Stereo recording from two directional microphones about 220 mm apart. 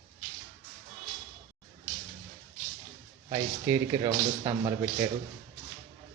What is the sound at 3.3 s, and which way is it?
Speech, 15° right (ahead or behind).